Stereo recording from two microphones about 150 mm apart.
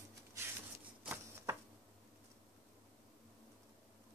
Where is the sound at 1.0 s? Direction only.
15° right (ahead or behind).